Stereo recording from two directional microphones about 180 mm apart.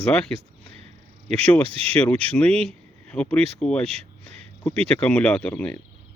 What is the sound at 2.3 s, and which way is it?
Speech, 5° left (ahead or behind).